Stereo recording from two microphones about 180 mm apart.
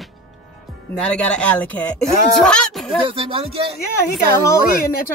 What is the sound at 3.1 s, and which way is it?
Speech, 30° right (ahead or behind).